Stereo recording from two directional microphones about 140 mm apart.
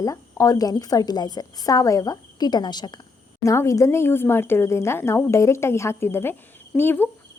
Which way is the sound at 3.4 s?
20° left (ahead or behind).